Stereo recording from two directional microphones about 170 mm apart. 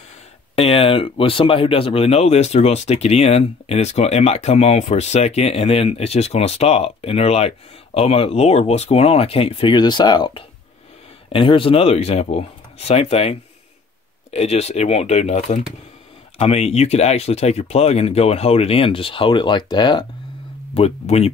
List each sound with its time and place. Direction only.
0.6 s speech: 35° left (ahead or behind)
20.7 s speech: 35° left (ahead or behind)